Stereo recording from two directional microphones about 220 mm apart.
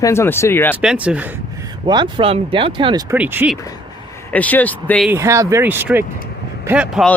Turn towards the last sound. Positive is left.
turn(degrees=-5)  # may be behind; listen again after turning